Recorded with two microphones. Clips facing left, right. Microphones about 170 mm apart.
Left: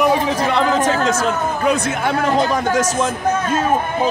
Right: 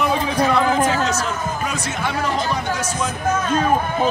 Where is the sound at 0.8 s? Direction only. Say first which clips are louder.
Left 2 dB; 50° left (ahead or behind).